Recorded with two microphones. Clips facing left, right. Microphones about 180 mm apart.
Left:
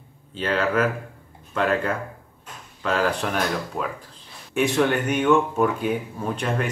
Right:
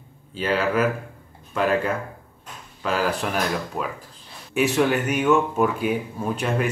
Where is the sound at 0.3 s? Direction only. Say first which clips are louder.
Right 1 dB; 10° right (ahead or behind).